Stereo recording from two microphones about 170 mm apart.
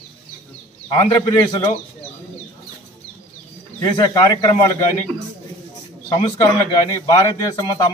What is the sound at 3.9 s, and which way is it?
Speech, 25° left (ahead or behind).